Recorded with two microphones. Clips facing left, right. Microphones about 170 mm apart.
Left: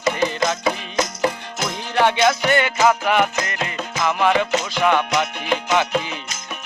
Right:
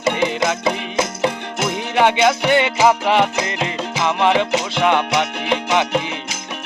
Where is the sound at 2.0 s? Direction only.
15° right (ahead or behind).